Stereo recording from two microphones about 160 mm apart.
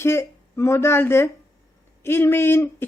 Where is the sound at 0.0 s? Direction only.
15° left (ahead or behind).